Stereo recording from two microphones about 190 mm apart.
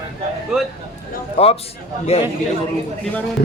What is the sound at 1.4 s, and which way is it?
Speech, 30° left (ahead or behind).